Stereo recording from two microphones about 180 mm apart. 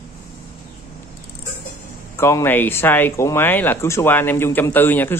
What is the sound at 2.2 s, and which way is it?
Speech, 15° left (ahead or behind).